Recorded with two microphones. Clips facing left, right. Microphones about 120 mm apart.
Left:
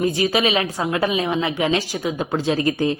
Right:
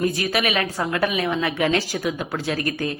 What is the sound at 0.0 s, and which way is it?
A woman's voice, 20° left (ahead or behind).